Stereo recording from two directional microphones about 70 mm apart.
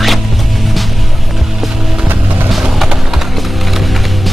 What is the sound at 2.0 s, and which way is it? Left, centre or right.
Vehicle, right.